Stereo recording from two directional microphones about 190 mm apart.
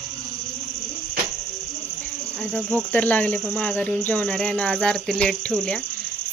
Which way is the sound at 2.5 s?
10° left (ahead or behind).